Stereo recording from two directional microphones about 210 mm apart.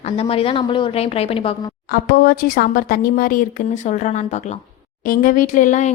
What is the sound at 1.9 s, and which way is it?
Speech, 45° left (ahead or behind).